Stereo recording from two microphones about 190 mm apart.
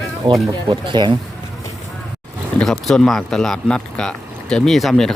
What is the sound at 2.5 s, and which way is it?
Speech, 5° left (ahead or behind).